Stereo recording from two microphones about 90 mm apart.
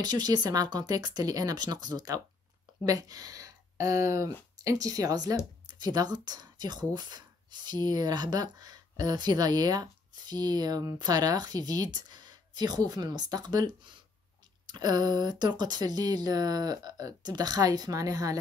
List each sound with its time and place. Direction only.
0.0 s speech: 50° right (ahead or behind)